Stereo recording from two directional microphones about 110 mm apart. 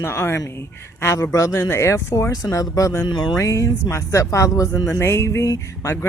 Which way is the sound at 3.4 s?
30° left (ahead or behind).